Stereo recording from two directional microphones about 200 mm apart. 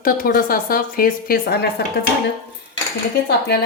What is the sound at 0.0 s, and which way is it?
Speech, 45° left (ahead or behind).